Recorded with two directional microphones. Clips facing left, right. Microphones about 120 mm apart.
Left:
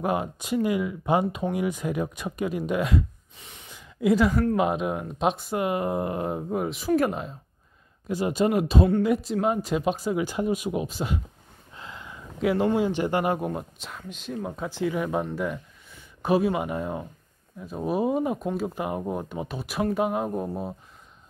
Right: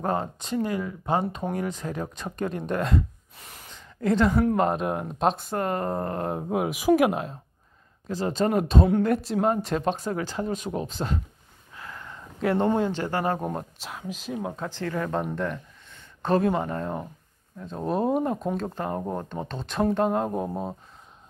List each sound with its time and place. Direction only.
0.0 s speech: 10° left (ahead or behind)
8.1 s speech: 10° left (ahead or behind)
11.7 s a sound: 20° left (ahead or behind)
12.4 s speech: 5° left (ahead or behind)
13.5 s speech: centre (ahead or behind)
14.7 s speech: 10° left (ahead or behind)